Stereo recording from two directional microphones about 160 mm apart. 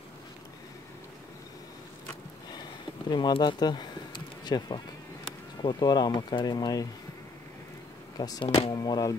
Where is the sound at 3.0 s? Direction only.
25° left (ahead or behind).